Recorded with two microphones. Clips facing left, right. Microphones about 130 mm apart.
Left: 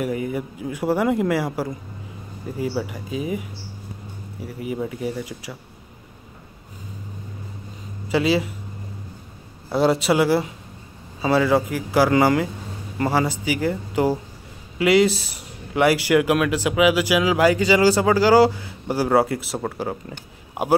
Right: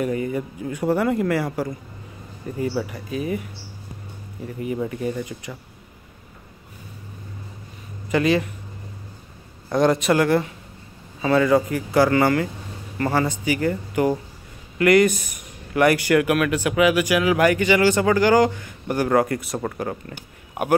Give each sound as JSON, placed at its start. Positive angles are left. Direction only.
{"t": 0.0, "sound": "speech", "side_deg": 10}
{"t": 8.1, "sound": "speech", "side_deg": 10}
{"t": 9.7, "sound": "speech", "side_deg": 10}
{"t": 15.7, "sound": "speech", "side_deg": 15}